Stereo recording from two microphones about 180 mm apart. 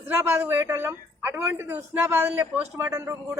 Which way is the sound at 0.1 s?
10° right (ahead or behind).